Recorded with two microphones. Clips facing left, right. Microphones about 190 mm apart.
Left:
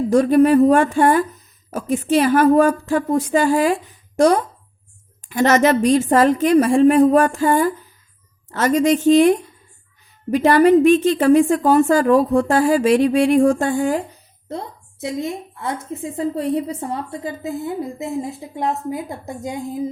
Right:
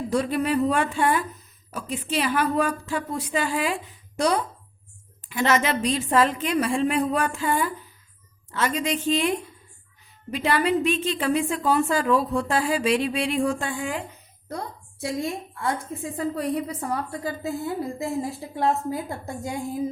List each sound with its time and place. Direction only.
0.1 s a woman's voice: 45° left (ahead or behind)
10.3 s a woman's voice: 45° left (ahead or behind)
14.4 s a woman's voice: 25° left (ahead or behind)